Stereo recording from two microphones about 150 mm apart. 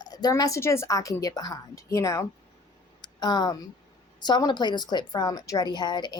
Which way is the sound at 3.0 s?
30° left (ahead or behind).